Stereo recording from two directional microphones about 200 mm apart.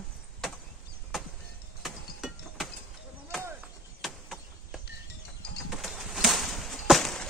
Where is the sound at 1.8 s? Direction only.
Centre (ahead or behind).